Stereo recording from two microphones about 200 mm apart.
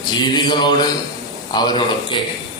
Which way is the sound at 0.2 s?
20° left (ahead or behind).